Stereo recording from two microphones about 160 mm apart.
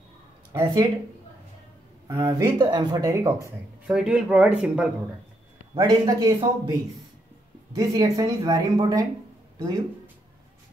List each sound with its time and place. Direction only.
0.5 s speech: 20° right (ahead or behind)
2.0 s speech: 20° right (ahead or behind)
3.9 s speech: 5° right (ahead or behind)
5.8 s speech: 20° right (ahead or behind)
7.7 s speech: 20° right (ahead or behind)